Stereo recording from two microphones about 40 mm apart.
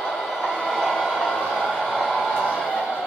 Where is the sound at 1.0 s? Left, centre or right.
Centre.